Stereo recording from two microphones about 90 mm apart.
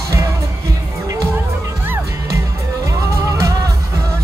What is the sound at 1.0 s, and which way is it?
Music, 35° right (ahead or behind).